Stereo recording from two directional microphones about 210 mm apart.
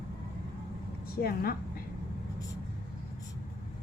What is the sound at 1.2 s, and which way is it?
Speech, 45° left (ahead or behind).